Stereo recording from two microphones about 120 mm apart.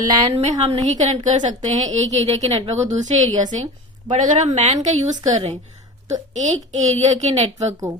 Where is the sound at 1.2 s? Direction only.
85° right; by 4.7 s 70° right (ahead or behind).